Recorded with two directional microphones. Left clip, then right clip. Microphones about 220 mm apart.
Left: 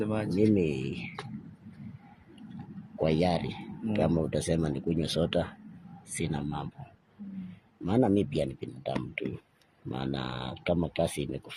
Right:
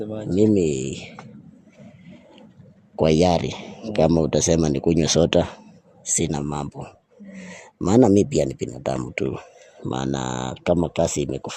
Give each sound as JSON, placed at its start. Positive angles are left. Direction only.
{"t": 0.0, "sound": "speech", "side_deg": 15}
{"t": 0.3, "sound": "speech", "side_deg": -45}
{"t": 3.0, "sound": "speech", "side_deg": -50}
{"t": 7.9, "sound": "speech", "side_deg": -55}